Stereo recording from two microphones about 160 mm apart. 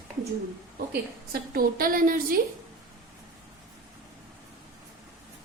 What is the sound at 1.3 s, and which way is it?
A woman's voice, 65° right (ahead or behind).